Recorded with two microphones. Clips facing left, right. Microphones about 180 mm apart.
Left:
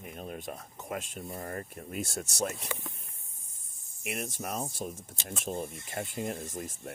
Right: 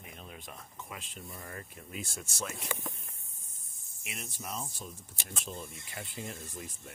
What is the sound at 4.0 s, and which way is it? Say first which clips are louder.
Speech: left 8 dB; 55° left (ahead or behind).